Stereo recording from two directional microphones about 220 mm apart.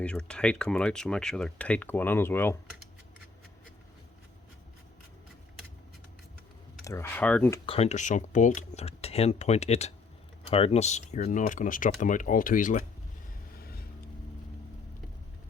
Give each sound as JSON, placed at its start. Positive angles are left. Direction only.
{"t": 0.0, "sound": "speech", "side_deg": 5}
{"t": 6.8, "sound": "speech", "side_deg": 10}
{"t": 7.7, "sound": "speech", "side_deg": 30}
{"t": 13.6, "sound": "vehicle", "side_deg": 45}